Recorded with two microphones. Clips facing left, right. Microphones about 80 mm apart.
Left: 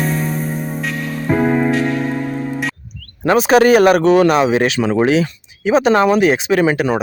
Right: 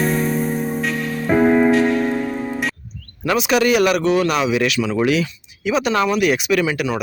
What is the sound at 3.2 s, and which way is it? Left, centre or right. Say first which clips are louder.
Speech: left 6 dB; left.